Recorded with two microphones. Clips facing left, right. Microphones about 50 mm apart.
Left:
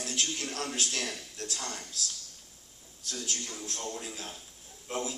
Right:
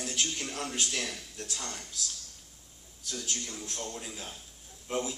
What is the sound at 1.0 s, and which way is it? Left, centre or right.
Speech, left.